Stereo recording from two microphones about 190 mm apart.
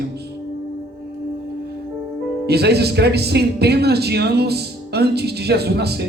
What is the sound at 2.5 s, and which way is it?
Speech, 60° right (ahead or behind).